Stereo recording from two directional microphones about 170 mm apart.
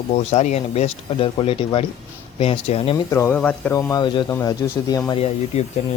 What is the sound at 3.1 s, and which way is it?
A man's voice, 15° left (ahead or behind).